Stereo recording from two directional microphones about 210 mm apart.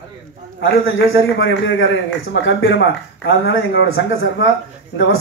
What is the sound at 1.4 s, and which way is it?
Speech, 60° left (ahead or behind).